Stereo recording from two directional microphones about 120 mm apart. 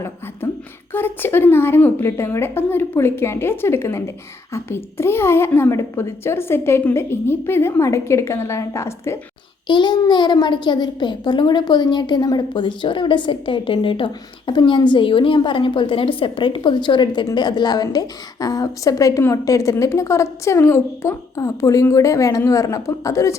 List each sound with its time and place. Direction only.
0.9 s a woman's voice: 15° left (ahead or behind)
9.6 s a child's voice: 40° left (ahead or behind)